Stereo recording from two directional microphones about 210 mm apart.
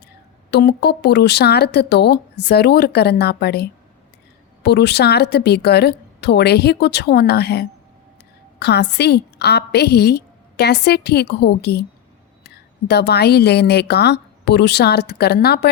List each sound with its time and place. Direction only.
0.5 s a woman's voice: 50° left (ahead or behind)